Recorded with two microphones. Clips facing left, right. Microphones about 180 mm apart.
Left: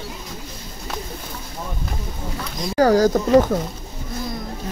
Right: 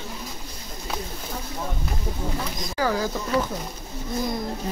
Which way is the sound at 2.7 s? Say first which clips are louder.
Left 10 dB; 40° left (ahead or behind).